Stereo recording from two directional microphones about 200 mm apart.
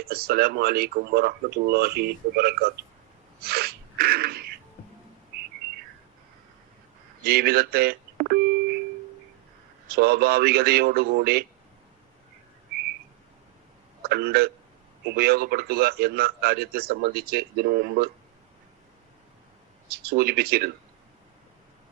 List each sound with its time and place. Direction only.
0.0 s a man's voice: 50° right (ahead or behind)
3.4 s sneeze: 50° right (ahead or behind)
7.3 s doorbell: 50° right (ahead or behind)
9.9 s a man's voice: 50° right (ahead or behind)
14.0 s a man's voice: 50° right (ahead or behind)
19.9 s a man's voice: 50° right (ahead or behind)